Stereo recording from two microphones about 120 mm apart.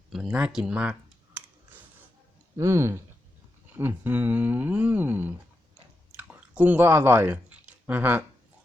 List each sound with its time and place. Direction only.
0.1 s speech: 5° right (ahead or behind)
2.6 s speech: 20° right (ahead or behind)
6.1 s a sound: 15° right (ahead or behind)